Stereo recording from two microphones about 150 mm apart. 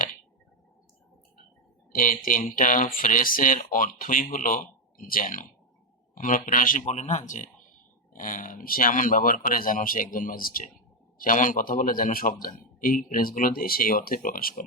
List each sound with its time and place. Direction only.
1.9 s a man's voice: 65° left (ahead or behind)